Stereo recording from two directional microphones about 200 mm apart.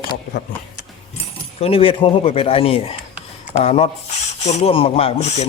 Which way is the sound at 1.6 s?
30° left (ahead or behind).